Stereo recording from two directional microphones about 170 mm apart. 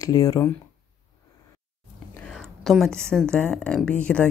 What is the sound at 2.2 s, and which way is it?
Speech, 5° left (ahead or behind).